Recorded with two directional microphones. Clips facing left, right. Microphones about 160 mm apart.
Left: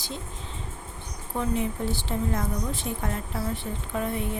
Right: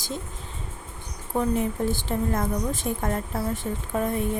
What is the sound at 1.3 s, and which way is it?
A woman's voice, 50° right (ahead or behind).